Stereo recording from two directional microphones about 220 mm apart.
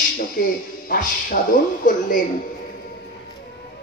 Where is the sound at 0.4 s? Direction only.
40° left (ahead or behind).